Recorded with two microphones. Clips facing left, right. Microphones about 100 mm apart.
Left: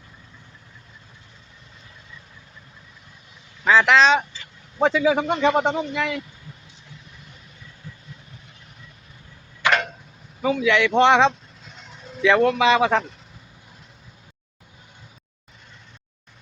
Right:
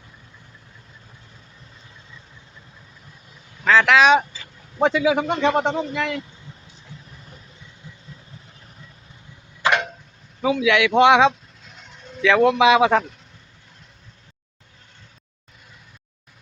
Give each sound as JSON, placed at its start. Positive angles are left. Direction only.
{"t": 3.6, "sound": "speech", "side_deg": 5}
{"t": 4.0, "sound": "speech", "side_deg": -10}
{"t": 7.8, "sound": "vehicle", "side_deg": -15}
{"t": 9.6, "sound": "tick-tock", "side_deg": -30}
{"t": 10.4, "sound": "a sound", "side_deg": -5}
{"t": 12.5, "sound": "speech", "side_deg": -10}